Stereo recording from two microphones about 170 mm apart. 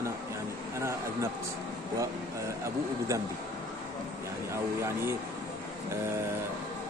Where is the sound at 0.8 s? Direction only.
15° right (ahead or behind).